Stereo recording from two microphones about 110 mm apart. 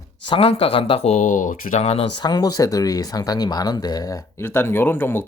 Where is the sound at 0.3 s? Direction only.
55° left (ahead or behind); by 2.0 s 70° left (ahead or behind).